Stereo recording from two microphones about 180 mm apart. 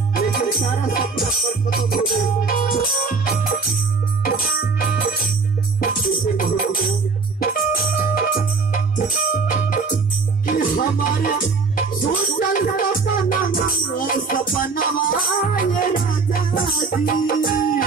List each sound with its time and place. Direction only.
0.1 s music: 55° left (ahead or behind)
4.7 s music: 55° left (ahead or behind)